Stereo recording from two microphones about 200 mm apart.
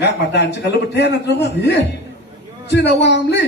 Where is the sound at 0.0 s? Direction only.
60° left (ahead or behind).